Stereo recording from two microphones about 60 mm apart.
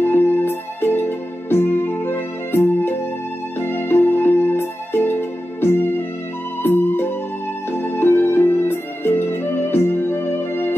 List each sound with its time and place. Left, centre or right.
0.0 s music: left